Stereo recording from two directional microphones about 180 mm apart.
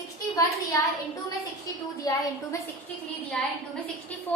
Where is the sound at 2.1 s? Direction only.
20° left (ahead or behind).